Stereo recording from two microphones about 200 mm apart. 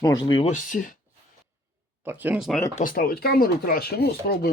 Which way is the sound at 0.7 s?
40° left (ahead or behind).